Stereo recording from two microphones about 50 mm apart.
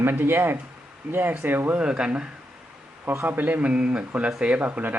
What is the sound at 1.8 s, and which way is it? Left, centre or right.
Speech, centre.